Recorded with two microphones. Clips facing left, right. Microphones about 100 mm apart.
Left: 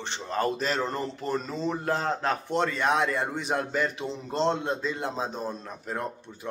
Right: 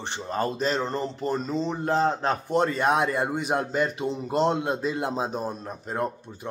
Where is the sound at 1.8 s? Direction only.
25° right (ahead or behind).